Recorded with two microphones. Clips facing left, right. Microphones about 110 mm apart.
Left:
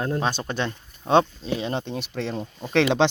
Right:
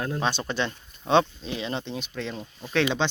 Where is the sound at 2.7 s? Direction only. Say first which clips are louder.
Left 5 dB; 75° left (ahead or behind).